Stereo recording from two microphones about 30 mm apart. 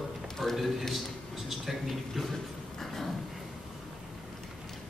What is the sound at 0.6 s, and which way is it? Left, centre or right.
A man's voice, centre.